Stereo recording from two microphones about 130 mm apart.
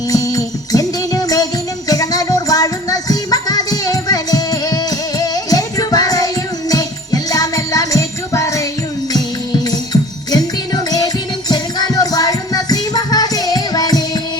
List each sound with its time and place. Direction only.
0.1 s music: 25° left (ahead or behind)